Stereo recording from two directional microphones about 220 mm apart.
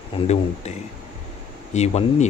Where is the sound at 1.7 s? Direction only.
30° left (ahead or behind).